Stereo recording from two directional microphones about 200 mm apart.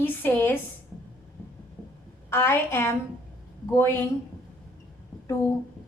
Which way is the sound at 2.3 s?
10° left (ahead or behind).